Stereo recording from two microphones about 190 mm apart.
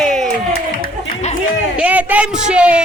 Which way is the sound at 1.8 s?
5° right (ahead or behind).